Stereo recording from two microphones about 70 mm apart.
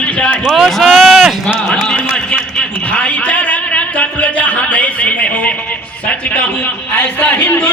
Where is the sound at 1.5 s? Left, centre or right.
Centre.